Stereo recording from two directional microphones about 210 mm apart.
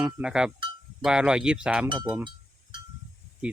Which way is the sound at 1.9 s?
20° right (ahead or behind).